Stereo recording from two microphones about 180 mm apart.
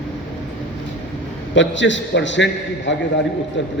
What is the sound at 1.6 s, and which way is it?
A man's voice, 90° left.